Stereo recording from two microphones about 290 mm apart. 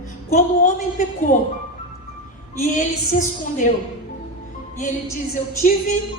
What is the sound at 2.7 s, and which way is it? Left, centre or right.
Speech, left.